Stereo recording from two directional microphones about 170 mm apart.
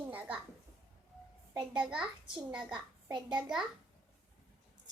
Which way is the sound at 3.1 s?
25° right (ahead or behind).